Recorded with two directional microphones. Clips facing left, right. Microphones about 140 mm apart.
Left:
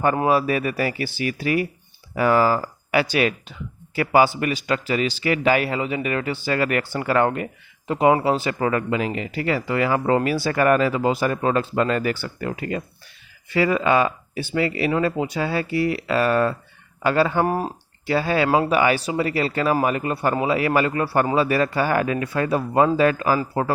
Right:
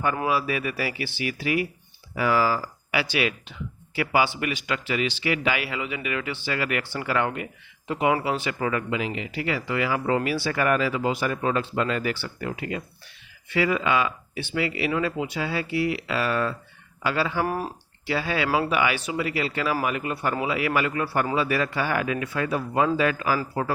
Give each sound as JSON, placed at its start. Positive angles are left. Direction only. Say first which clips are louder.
{"t": 0.2, "sound": "a man's voice", "louder": "left 6 dB", "side_deg": 40}
{"t": 17.4, "sound": "speech", "louder": "left 5 dB", "side_deg": 25}
{"t": 18.0, "sound": "speech", "louder": "left 6 dB", "side_deg": 40}
{"t": 18.4, "sound": "speech", "louder": "left 3 dB", "side_deg": 25}
{"t": 18.7, "sound": "a man's voice", "louder": "left 5 dB", "side_deg": 40}